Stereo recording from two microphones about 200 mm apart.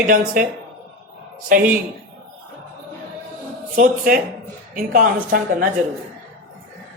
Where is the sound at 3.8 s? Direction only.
45° right (ahead or behind).